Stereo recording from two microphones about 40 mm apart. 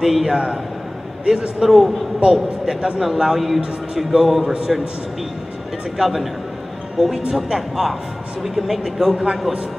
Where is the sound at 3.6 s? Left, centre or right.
Right.